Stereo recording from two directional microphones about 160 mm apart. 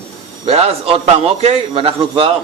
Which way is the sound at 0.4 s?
40° right (ahead or behind).